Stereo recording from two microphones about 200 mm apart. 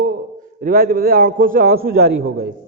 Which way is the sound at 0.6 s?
45° right (ahead or behind).